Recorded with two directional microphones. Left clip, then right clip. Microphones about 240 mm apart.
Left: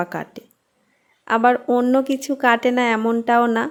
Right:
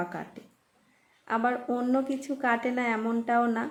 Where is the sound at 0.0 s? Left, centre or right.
Left.